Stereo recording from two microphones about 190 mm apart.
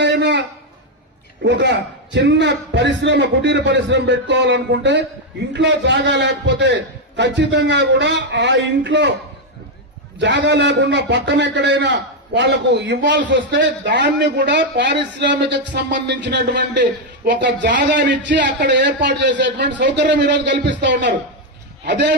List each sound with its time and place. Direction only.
0.0 s a sound: 65° right (ahead or behind)
1.4 s a man's voice: 65° right (ahead or behind)
10.2 s a man's voice: 65° right (ahead or behind)
17.7 s a man's voice: 45° right (ahead or behind)
18.7 s speech: 65° right (ahead or behind)